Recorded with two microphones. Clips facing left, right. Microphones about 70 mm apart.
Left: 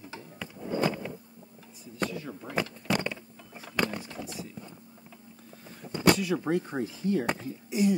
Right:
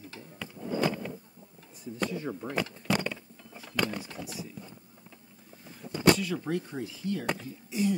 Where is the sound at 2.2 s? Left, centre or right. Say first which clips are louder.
Right 4 dB; centre.